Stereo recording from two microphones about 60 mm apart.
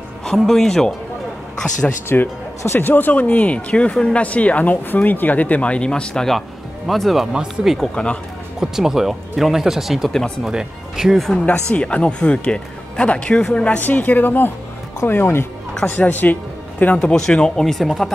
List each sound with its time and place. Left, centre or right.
0.4 s speech: centre
2.1 s speech: left; by 6.3 s centre
6.9 s speech: centre
7.9 s speech: centre
8.5 s speech: centre
11.1 s speech: centre
11.7 s speech: left
13.4 s speech: centre
13.7 s speech: left; by 18.1 s centre